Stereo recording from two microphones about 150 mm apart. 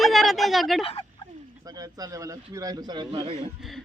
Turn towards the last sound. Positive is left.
turn(degrees=-30)  # may be behind; listen again after turning